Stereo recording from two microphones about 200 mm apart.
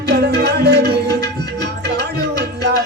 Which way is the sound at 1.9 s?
55° right (ahead or behind).